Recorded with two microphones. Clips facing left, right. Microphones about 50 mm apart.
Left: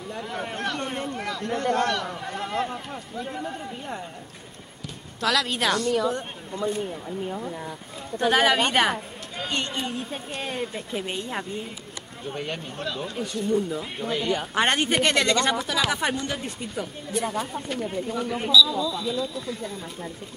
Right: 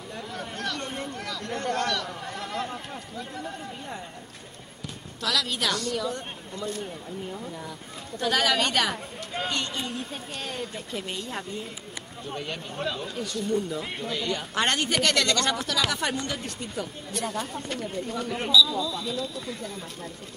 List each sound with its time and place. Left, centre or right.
1.0 s speech: centre
5.2 s speech: left
12.9 s speech: centre
13.2 s speech: centre
14.0 s speech: centre